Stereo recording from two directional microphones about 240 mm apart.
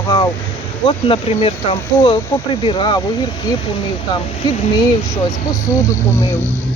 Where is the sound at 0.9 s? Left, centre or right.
Left.